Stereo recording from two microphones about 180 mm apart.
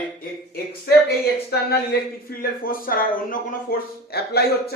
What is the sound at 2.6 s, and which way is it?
Speech, 50° left (ahead or behind).